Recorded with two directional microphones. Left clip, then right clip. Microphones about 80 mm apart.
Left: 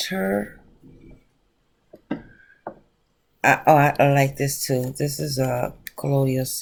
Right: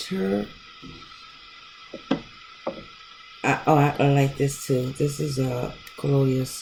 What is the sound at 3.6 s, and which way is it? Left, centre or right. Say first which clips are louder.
Speech: left 3 dB; centre.